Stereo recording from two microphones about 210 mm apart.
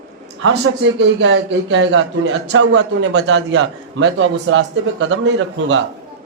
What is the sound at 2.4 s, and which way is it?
Speech, 85° right.